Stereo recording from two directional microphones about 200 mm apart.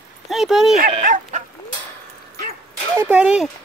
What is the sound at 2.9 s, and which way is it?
Speech, 10° right (ahead or behind).